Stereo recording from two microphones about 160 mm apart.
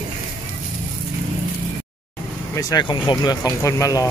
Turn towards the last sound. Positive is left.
turn(degrees=20)  # may be behind; listen again after turning